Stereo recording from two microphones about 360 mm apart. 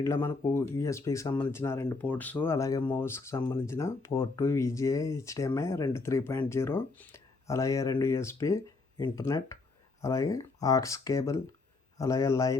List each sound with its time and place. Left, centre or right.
0.0 s speech: centre